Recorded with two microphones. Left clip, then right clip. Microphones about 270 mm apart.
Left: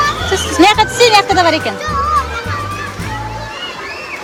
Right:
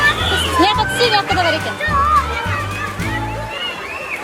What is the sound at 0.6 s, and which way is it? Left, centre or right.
Music, left.